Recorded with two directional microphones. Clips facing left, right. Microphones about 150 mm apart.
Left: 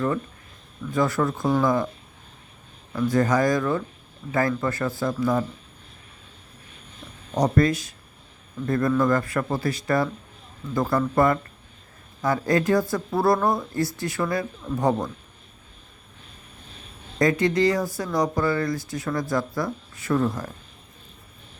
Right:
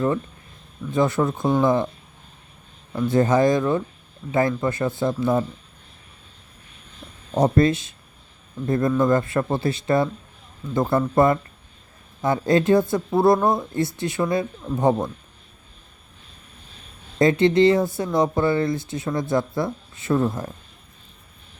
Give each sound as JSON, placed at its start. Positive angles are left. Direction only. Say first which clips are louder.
{"t": 0.9, "sound": "speech", "louder": "right 2 dB", "side_deg": -20}
{"t": 2.9, "sound": "speech", "louder": "right 2 dB", "side_deg": -25}
{"t": 7.3, "sound": "speech", "louder": "right 3 dB", "side_deg": -25}
{"t": 17.2, "sound": "speech", "louder": "right 4 dB", "side_deg": -25}